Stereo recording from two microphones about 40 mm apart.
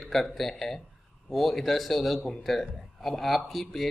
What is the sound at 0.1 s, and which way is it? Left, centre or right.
Speech, centre.